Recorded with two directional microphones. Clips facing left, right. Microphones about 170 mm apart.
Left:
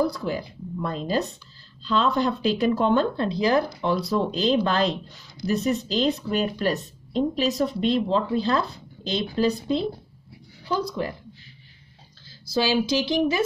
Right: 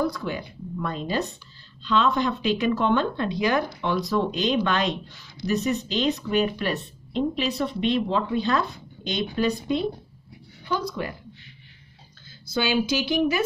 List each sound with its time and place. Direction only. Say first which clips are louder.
0.0 s speech: left 2 dB; 35° left (ahead or behind)
12.3 s a sound: left 2 dB; 30° left (ahead or behind)
12.9 s speech: left 1 dB; 30° left (ahead or behind)